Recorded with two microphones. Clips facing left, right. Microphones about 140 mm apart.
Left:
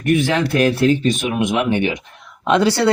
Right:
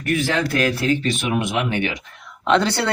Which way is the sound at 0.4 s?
30° left (ahead or behind).